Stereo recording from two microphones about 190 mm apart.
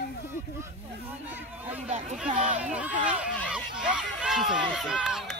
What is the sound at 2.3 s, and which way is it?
Speech, 40° right (ahead or behind).